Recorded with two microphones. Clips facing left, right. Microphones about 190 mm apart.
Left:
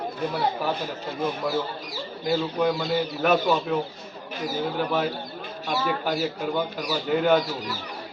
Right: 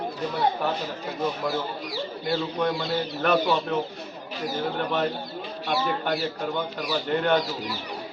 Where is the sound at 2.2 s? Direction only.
5° left (ahead or behind).